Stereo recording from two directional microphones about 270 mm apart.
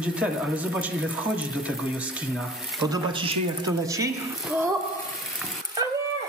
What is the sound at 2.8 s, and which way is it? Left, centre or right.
Speech, centre.